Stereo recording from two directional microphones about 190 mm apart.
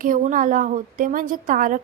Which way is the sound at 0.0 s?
45° right (ahead or behind).